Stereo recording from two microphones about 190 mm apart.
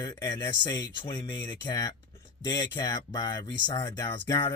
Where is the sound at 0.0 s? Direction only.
20° left (ahead or behind).